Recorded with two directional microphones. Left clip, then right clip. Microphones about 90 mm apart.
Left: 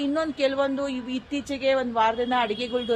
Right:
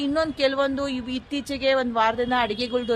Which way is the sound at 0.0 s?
45° right (ahead or behind).